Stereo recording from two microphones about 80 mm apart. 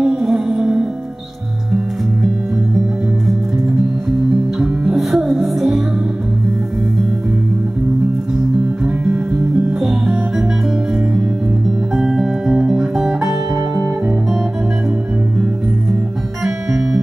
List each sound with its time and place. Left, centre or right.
0.0 s music: centre
4.2 s music: centre
9.0 s music: centre
9.8 s music: centre
11.9 s music: centre
16.4 s music: centre